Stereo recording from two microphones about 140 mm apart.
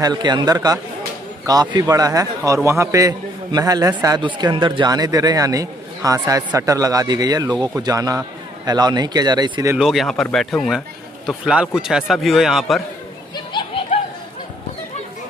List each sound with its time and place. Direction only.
0.0 s a man's voice: 30° right (ahead or behind)
9.8 s a man's voice: centre (ahead or behind)
13.5 s a sound: 35° left (ahead or behind)